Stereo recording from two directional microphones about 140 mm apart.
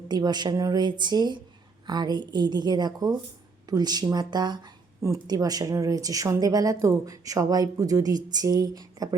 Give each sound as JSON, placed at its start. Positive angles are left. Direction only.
{"t": 0.1, "sound": "speech", "side_deg": -30}